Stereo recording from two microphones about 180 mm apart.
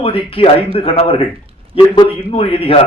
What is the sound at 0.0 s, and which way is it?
A man's voice, 30° left (ahead or behind).